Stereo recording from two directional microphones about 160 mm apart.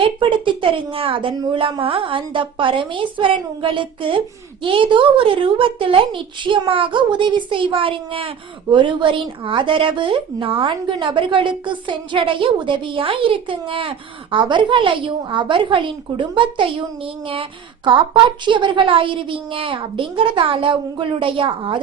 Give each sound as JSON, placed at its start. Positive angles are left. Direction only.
{"t": 0.0, "sound": "a woman's voice", "side_deg": -30}